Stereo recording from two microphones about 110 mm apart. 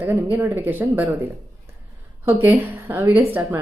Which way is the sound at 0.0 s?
20° right (ahead or behind).